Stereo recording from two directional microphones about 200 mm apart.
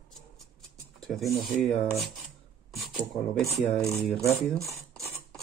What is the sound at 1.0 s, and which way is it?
Speech, centre (ahead or behind).